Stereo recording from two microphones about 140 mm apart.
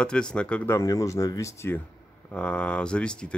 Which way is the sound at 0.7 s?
25° left (ahead or behind).